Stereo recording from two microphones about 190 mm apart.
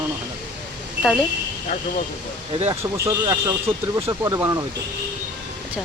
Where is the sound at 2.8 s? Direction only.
20° right (ahead or behind).